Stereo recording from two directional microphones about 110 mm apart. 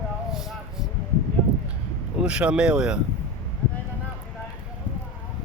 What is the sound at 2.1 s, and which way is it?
Speech, 10° right (ahead or behind).